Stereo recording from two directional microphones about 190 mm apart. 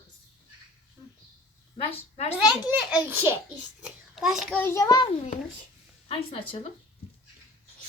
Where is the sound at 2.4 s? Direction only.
5° right (ahead or behind).